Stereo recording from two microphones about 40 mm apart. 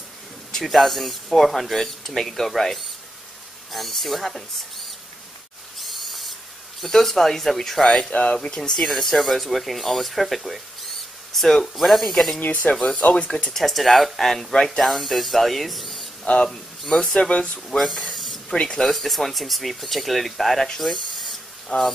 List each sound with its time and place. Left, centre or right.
0.7 s speech: centre
5.8 s owl: centre
6.8 s speech: centre
7.8 s speech: centre
12.4 s speech: left
13.1 s speech: left
13.5 s speech: centre
14.8 s speech: centre
16.3 s speech: left
17.8 s speech: centre
18.6 s speech: left
18.9 s speech: centre